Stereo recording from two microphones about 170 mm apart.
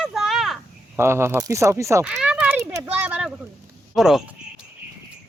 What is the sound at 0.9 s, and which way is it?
Speech, 15° right (ahead or behind).